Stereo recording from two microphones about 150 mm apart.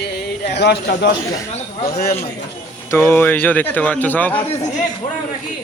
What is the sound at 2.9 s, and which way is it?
A man's voice, 15° left (ahead or behind).